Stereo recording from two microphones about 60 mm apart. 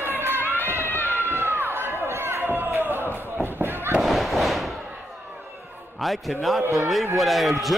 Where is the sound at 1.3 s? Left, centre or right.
Right.